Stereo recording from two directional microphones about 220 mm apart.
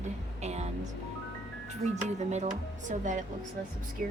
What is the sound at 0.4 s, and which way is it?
Music, 30° right (ahead or behind).